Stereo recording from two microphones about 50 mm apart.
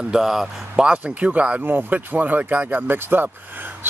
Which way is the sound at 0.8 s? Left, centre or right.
Right.